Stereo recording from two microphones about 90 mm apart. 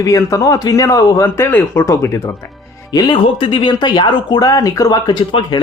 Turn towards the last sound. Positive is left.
turn(degrees=60)  # may be behind; listen again after turning